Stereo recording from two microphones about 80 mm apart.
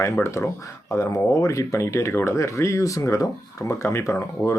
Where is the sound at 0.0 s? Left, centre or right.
Left.